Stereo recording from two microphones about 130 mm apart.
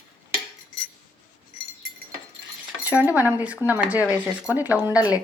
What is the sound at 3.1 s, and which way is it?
A woman's voice, 10° right (ahead or behind).